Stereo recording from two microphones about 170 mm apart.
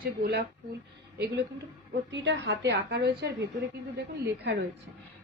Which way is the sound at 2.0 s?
90° right.